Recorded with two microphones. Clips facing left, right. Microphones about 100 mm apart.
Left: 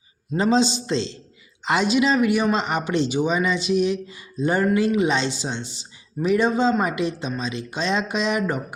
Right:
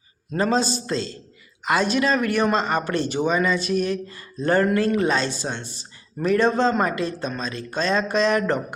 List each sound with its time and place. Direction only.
0.5 s a man's voice: 20° left (ahead or behind)